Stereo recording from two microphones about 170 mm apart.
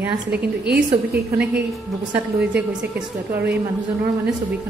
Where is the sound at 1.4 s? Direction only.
10° right (ahead or behind).